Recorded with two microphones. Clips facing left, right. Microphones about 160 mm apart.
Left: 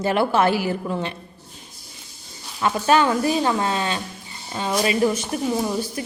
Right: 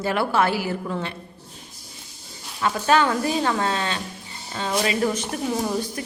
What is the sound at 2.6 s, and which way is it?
Speech, 20° left (ahead or behind).